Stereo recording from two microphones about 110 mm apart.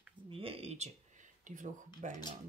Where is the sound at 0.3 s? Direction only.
60° right (ahead or behind); by 0.9 s 80° right.